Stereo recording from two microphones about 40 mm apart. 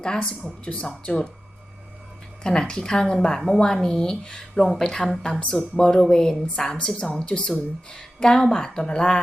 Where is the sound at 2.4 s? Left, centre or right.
Centre.